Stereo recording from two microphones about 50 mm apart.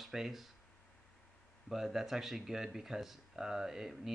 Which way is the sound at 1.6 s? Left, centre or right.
Centre.